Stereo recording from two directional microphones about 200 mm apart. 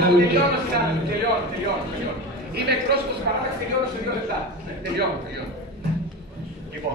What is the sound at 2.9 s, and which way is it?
Speech, 55° right (ahead or behind).